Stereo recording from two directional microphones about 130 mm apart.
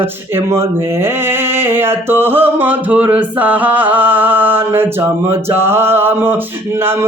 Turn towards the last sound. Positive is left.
turn(degrees=-20)  # may be behind; listen again after turning